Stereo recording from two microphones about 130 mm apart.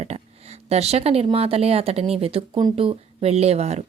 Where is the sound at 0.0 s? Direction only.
55° right (ahead or behind).